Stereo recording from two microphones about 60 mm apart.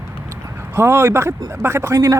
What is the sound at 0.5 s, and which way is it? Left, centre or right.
Speech, right.